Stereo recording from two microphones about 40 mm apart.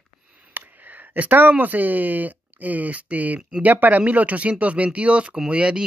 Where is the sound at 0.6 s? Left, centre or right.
Right.